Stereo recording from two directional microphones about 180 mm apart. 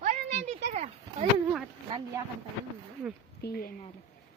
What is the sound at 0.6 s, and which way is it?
Speech, 40° right (ahead or behind).